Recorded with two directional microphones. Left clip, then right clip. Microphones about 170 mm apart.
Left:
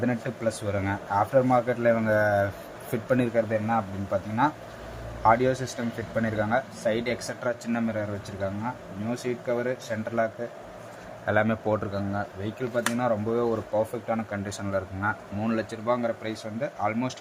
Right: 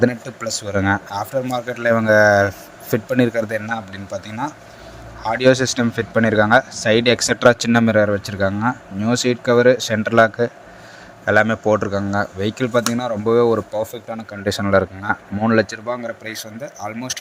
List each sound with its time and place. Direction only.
0.0 s speech: 45° right (ahead or behind)
1.1 s speech: centre (ahead or behind)
1.8 s speech: 25° right (ahead or behind)
3.8 s speech: centre (ahead or behind)
5.4 s speech: 40° right (ahead or behind)
11.3 s speech: 15° right (ahead or behind); by 13.8 s 35° right (ahead or behind)
14.1 s speech: centre (ahead or behind)
14.5 s speech: 50° right (ahead or behind)
16.6 s speech: centre (ahead or behind)